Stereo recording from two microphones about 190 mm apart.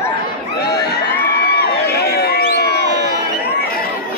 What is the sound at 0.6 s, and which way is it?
Crowd, 60° left (ahead or behind).